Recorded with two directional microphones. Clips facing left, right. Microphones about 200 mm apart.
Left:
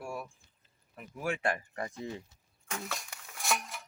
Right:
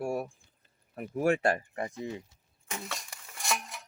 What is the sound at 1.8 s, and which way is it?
Speech, 20° right (ahead or behind).